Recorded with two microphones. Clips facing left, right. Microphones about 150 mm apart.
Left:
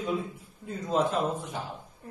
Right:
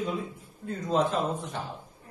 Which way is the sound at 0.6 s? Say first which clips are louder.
Right 1 dB; 5° left (ahead or behind).